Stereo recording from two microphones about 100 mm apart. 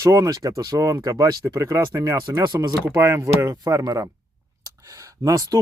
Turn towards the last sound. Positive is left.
turn(degrees=-35)  # may be behind; listen again after turning